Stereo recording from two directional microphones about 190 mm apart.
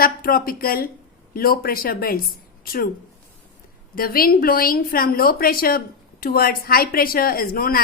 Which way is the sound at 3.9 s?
50° left (ahead or behind).